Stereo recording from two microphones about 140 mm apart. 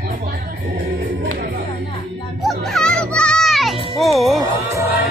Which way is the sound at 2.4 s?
Centre (ahead or behind).